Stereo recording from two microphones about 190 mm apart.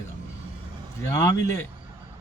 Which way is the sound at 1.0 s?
15° left (ahead or behind).